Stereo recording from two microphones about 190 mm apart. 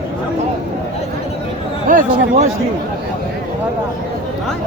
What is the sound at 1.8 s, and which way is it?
Speech, 45° right (ahead or behind).